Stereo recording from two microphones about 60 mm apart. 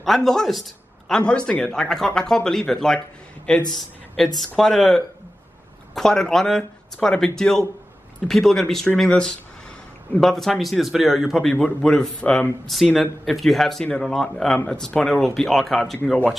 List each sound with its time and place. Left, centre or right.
0.0 s a man's voice: centre
1.2 s speech: centre
12.2 s speech: left
12.7 s speech: centre